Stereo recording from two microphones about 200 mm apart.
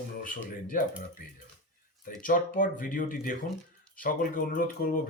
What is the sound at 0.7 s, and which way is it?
A man's voice, 40° left (ahead or behind).